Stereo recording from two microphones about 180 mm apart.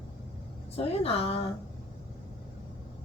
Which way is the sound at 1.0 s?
35° left (ahead or behind).